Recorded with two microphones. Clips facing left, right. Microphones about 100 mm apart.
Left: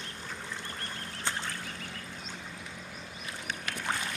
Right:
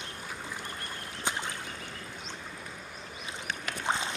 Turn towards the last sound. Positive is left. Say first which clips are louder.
# right 3 dB
turn(degrees=-20)  # may be behind; listen again after turning